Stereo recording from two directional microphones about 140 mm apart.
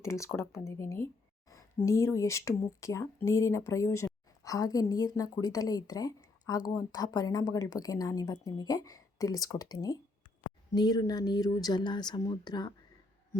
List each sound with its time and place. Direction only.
0.0 s a woman's voice: 20° left (ahead or behind)